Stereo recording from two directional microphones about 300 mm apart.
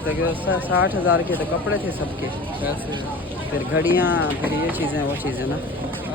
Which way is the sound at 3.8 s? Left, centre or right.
Centre.